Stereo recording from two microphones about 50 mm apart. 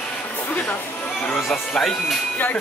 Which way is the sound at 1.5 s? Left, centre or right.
Centre.